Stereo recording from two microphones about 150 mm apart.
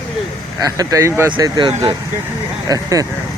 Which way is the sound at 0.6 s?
25° right (ahead or behind).